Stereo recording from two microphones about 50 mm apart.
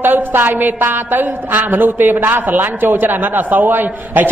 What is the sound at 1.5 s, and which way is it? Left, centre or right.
A man's voice, right.